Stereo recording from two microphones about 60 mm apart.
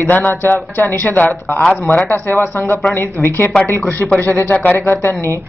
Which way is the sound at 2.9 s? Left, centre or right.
Left.